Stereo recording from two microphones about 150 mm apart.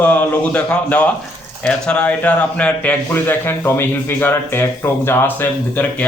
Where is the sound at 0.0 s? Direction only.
10° left (ahead or behind).